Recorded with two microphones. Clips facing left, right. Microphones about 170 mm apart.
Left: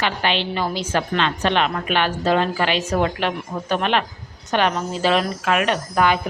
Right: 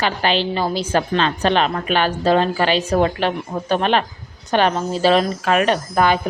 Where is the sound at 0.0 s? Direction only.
35° right (ahead or behind).